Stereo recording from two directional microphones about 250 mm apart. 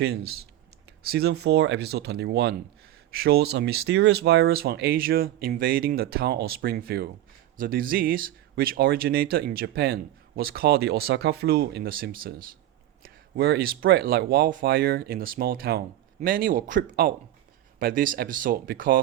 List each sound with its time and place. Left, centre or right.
0.0 s speech: right